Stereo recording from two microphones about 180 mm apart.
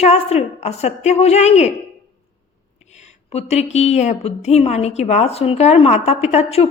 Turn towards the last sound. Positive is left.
turn(degrees=35)  # may be behind; listen again after turning